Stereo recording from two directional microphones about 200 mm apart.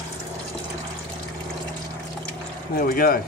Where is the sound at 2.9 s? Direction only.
45° left (ahead or behind).